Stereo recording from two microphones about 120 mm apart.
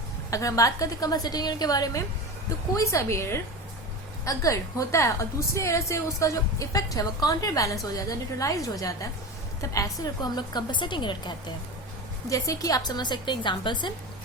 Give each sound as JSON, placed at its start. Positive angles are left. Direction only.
{"t": 0.3, "sound": "a woman's voice", "side_deg": 25}
{"t": 12.3, "sound": "a woman's voice", "side_deg": 30}